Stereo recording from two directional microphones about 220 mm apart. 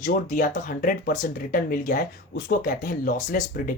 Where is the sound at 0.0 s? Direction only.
35° left (ahead or behind).